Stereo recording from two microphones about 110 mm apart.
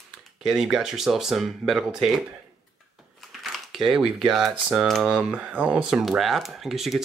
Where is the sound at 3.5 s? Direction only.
Centre (ahead or behind).